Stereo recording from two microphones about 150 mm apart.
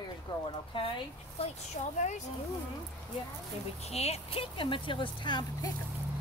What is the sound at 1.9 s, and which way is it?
Speech, 55° left (ahead or behind).